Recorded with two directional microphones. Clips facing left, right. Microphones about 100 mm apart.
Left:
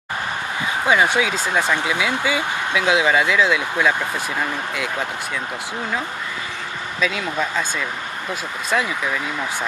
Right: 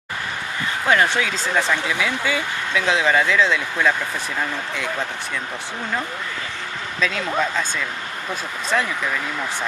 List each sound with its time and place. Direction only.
0.8 s speech: 10° left (ahead or behind)
7.0 s speech: 5° left (ahead or behind)
8.7 s speech: 5° left (ahead or behind)